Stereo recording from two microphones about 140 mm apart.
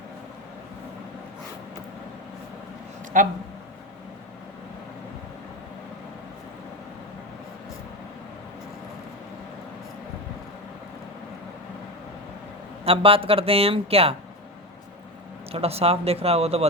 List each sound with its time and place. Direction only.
3.1 s speech: 70° right (ahead or behind)
12.8 s speech: 40° right (ahead or behind)
15.5 s speech: 45° right (ahead or behind)